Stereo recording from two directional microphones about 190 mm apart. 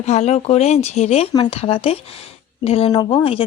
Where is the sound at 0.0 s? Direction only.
35° left (ahead or behind).